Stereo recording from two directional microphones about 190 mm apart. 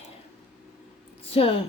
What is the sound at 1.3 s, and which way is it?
Speech, 30° left (ahead or behind).